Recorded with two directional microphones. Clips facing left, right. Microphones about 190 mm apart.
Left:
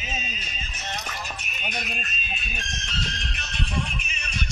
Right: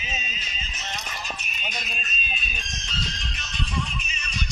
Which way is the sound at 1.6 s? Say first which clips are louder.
Left 3 dB; 60° left (ahead or behind).